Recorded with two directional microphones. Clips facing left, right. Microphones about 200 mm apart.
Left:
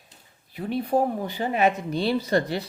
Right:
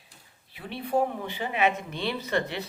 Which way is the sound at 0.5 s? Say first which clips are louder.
Left 4 dB; 40° left (ahead or behind).